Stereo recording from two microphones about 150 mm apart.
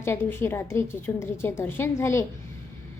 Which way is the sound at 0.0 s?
15° left (ahead or behind).